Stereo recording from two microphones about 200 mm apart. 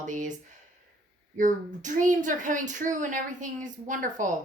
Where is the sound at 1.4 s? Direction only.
40° right (ahead or behind).